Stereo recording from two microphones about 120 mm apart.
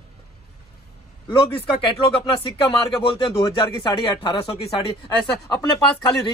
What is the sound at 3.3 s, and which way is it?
Speech, 25° left (ahead or behind).